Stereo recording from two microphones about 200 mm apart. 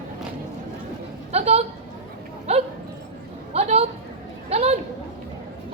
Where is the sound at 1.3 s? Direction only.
30° right (ahead or behind).